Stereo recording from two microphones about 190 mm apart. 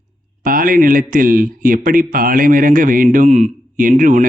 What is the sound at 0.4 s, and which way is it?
Speech, 45° right (ahead or behind).